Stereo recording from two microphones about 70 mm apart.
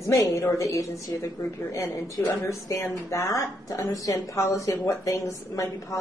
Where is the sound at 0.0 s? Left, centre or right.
Left.